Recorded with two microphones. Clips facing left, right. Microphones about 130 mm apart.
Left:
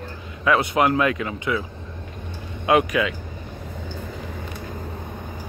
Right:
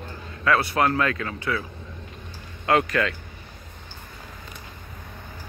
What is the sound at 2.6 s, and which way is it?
Speech, 15° left (ahead or behind).